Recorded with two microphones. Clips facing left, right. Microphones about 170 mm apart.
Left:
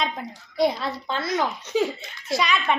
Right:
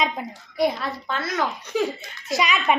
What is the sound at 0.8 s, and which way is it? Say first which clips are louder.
Speech: even; 30° left (ahead or behind).